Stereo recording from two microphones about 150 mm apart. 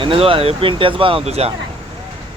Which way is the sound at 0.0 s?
35° right (ahead or behind).